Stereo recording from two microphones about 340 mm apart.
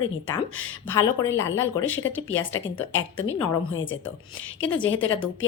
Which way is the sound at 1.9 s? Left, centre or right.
Left.